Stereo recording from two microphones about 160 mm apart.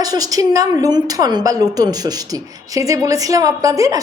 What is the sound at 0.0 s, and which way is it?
A woman's voice, 25° right (ahead or behind).